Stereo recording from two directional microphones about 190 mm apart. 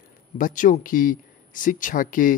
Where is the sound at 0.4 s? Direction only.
45° left (ahead or behind).